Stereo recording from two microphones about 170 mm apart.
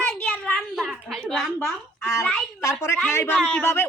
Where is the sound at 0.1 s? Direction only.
5° left (ahead or behind).